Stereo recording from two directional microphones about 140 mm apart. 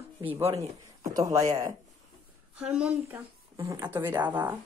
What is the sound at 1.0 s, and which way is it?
Speech, 25° right (ahead or behind).